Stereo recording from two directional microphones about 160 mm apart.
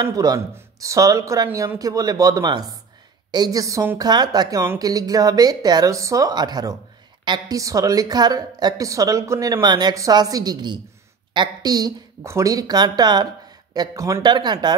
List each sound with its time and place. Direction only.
0.0 s a woman's voice: 20° right (ahead or behind)